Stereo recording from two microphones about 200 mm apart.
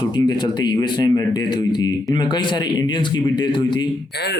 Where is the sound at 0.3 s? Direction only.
20° left (ahead or behind).